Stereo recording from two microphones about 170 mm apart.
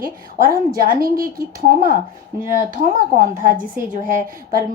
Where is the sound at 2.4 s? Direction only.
50° right (ahead or behind).